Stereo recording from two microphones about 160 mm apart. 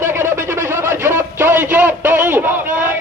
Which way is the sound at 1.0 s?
15° right (ahead or behind).